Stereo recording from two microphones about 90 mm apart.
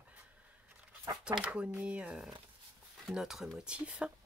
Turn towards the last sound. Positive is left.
turn(degrees=-10)  # may be behind; listen again after turning